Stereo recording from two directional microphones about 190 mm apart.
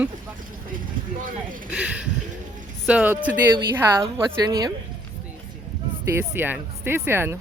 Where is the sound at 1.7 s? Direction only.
5° right (ahead or behind).